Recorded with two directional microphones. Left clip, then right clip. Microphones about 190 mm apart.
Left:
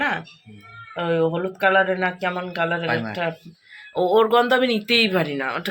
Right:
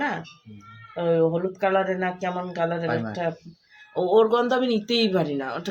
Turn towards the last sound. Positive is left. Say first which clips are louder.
# left 3 dB
turn(degrees=5)  # may be behind; listen again after turning